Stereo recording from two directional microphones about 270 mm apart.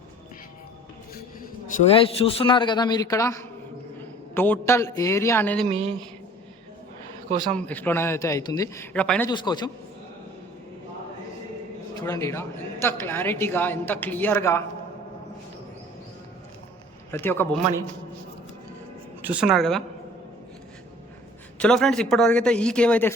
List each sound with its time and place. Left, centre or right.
1.1 s a sound: left
1.9 s a woman's voice: left
5.6 s a woman's voice: right
7.3 s speech: centre
7.5 s a woman's voice: centre
9.3 s a woman's voice: centre
11.9 s a woman's voice: centre
17.1 s a woman's voice: centre
19.2 s a man's voice: centre
21.6 s a man's voice: centre